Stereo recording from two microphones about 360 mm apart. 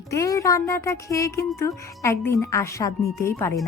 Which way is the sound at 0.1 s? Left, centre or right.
Centre.